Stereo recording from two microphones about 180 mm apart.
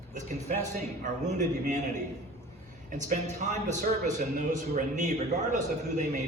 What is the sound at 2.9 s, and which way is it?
A man's voice, 45° right (ahead or behind).